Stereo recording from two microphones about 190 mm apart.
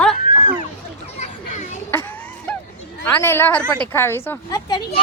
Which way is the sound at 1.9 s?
10° left (ahead or behind).